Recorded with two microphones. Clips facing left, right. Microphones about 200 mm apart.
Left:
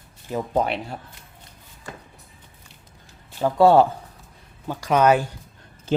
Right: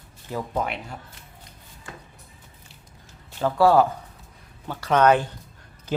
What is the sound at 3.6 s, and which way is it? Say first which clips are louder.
Speech: left 3 dB; 25° left (ahead or behind).